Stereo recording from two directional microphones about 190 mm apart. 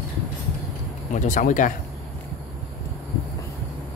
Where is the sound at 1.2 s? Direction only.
40° left (ahead or behind).